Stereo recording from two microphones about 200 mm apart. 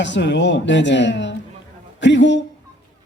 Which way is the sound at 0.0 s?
60° left (ahead or behind).